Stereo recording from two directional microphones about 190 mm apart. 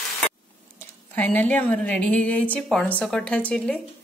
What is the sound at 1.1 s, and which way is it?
A woman's voice, 10° left (ahead or behind).